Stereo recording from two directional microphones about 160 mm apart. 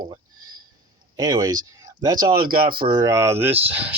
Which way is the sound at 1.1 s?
20° right (ahead or behind).